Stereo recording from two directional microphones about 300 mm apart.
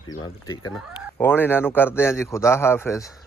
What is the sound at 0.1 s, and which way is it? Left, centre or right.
A man's voice, centre.